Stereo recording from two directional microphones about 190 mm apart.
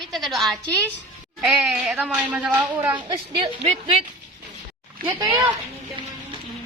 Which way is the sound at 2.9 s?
25° right (ahead or behind).